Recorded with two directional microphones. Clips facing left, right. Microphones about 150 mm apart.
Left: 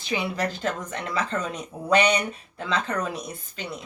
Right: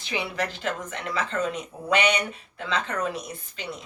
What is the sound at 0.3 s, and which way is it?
Speech, 40° left (ahead or behind).